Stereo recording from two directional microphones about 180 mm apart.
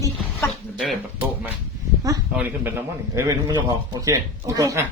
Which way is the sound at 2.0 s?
15° right (ahead or behind).